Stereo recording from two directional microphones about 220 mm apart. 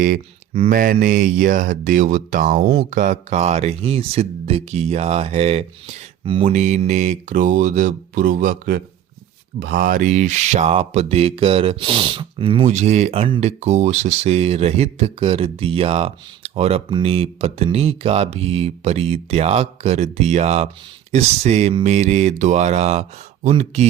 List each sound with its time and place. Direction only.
0.0 s speech: 30° right (ahead or behind)